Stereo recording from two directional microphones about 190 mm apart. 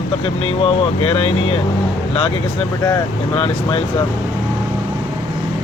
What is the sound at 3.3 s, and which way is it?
Speech, 30° left (ahead or behind).